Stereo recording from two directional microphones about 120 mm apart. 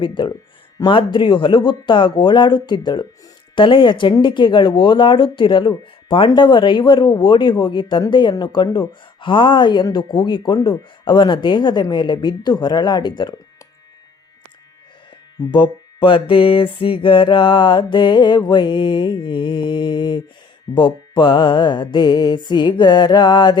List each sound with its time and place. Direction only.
0.0 s mantra: 40° left (ahead or behind)
15.5 s mantra: 40° left (ahead or behind)